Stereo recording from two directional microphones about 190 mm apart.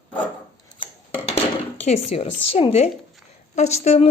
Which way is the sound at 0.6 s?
25° left (ahead or behind).